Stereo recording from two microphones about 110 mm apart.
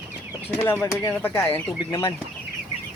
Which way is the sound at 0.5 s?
20° left (ahead or behind).